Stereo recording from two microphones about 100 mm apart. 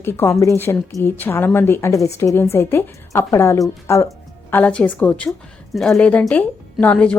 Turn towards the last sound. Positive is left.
turn(degrees=10)  # may be behind; listen again after turning